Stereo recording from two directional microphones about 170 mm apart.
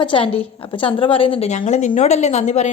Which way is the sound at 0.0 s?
30° left (ahead or behind).